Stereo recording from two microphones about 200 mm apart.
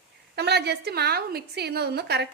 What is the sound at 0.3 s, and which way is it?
A woman's voice, 55° right (ahead or behind).